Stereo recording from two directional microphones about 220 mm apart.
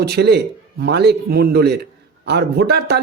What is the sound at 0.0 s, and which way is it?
Speech, 45° right (ahead or behind).